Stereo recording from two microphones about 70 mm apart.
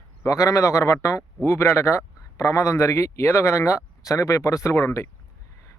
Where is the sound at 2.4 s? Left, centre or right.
Left.